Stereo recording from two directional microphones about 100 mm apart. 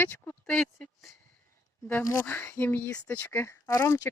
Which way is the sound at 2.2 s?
15° left (ahead or behind).